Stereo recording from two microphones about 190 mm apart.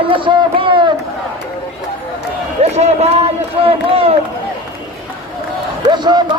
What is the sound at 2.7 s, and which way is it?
A man's voice, 35° right (ahead or behind).